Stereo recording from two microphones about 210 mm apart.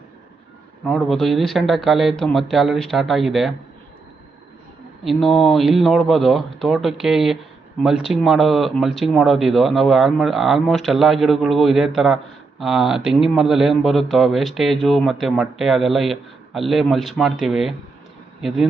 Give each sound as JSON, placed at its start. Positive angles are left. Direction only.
{"t": 0.9, "sound": "speech", "side_deg": 0}
{"t": 5.0, "sound": "speech", "side_deg": 0}